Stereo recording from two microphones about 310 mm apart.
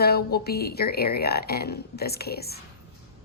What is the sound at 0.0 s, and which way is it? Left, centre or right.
A woman's voice, left.